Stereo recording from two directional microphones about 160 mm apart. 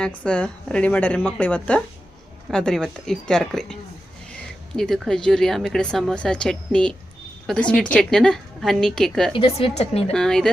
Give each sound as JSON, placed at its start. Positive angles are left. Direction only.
{"t": 0.0, "sound": "a woman's voice", "side_deg": 10}
{"t": 4.8, "sound": "speech", "side_deg": 5}
{"t": 9.3, "sound": "speech", "side_deg": 35}
{"t": 10.1, "sound": "speech", "side_deg": 5}